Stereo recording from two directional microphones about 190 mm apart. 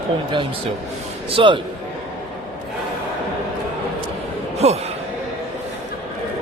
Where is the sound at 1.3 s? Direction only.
25° right (ahead or behind).